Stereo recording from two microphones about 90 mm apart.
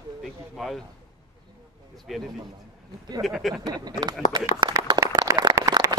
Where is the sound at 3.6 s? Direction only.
50° right (ahead or behind).